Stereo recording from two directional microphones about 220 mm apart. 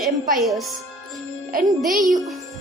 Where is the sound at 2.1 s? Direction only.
Centre (ahead or behind).